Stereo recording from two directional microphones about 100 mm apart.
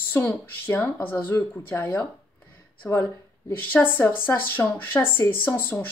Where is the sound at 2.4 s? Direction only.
20° left (ahead or behind).